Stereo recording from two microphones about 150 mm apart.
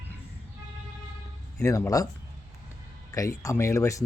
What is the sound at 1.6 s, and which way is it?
Speech, 20° left (ahead or behind).